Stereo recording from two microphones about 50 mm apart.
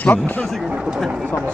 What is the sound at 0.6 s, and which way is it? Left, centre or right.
Speech, right.